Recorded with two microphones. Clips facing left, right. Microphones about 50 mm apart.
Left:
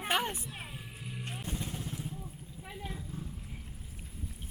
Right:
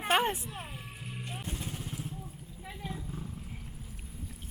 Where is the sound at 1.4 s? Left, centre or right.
Centre.